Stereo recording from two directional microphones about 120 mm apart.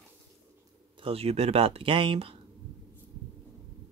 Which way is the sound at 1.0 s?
55° right (ahead or behind).